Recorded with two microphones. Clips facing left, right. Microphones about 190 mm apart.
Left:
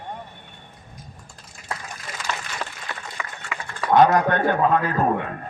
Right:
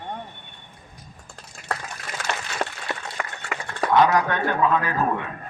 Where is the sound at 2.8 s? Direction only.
65° right (ahead or behind).